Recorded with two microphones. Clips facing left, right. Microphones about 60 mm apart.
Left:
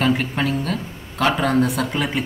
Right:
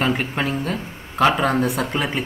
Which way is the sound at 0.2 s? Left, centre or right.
Centre.